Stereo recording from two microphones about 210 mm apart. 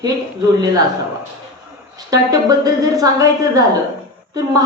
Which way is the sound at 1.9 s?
15° right (ahead or behind).